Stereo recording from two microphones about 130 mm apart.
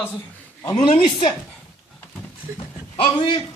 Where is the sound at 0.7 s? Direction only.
40° left (ahead or behind).